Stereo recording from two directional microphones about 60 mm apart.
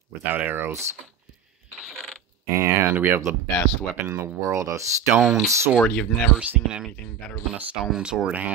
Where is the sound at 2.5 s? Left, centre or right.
Right.